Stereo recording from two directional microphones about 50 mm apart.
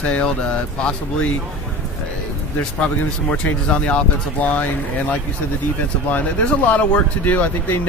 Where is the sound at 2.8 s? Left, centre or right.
Left.